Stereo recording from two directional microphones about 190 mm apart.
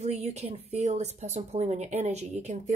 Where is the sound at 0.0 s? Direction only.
35° right (ahead or behind).